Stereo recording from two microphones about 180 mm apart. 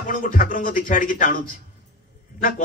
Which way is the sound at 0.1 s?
50° left (ahead or behind).